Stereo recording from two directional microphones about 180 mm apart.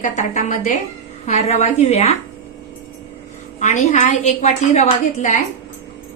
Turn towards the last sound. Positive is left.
turn(degrees=40)  # may be behind; listen again after turning